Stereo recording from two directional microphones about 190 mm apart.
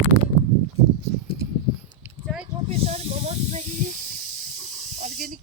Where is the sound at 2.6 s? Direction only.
30° right (ahead or behind).